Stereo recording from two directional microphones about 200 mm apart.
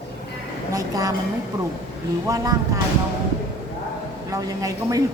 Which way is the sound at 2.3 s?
15° right (ahead or behind).